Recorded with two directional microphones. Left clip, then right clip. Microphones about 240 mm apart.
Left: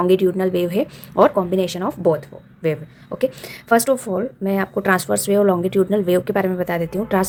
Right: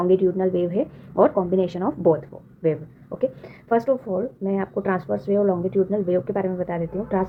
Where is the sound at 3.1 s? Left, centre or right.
Left.